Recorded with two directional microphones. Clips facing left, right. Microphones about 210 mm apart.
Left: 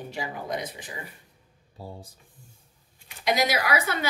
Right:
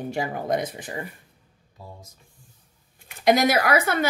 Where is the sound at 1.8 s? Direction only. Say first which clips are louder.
Left 3 dB; 30° left (ahead or behind).